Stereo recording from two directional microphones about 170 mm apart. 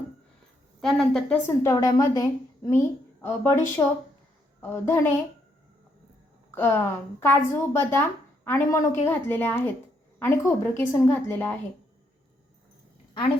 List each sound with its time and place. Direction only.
0.8 s a woman's voice: centre (ahead or behind)
1.5 s a woman's voice: 20° left (ahead or behind)
6.5 s speech: 15° left (ahead or behind)